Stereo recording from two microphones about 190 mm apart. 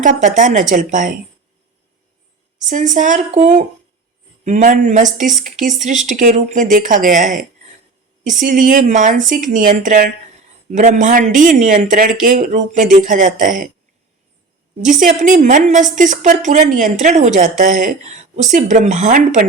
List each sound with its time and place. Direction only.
0.0 s speech: 40° right (ahead or behind)
2.6 s a woman's voice: 40° right (ahead or behind)
14.8 s a woman's voice: 40° right (ahead or behind)